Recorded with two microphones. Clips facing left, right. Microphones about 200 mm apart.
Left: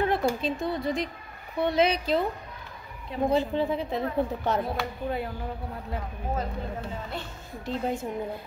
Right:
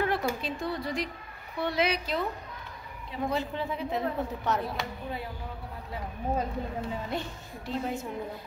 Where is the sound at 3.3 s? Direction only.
30° left (ahead or behind).